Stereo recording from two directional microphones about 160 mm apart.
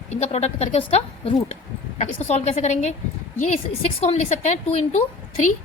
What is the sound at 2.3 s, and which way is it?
Speech, 45° left (ahead or behind).